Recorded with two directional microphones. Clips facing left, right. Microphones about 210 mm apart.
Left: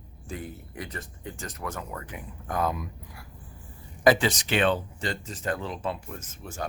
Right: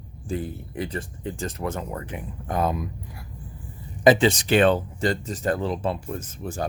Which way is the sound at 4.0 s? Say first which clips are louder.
Right 4 dB; 20° right (ahead or behind).